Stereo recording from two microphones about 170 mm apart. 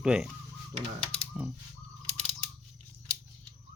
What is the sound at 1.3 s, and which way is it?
Mechanisms, 5° right (ahead or behind).